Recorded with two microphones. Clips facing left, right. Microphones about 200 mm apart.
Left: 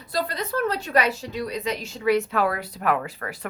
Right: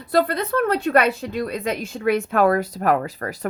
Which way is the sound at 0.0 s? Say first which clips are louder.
Right 8 dB; 60° right (ahead or behind).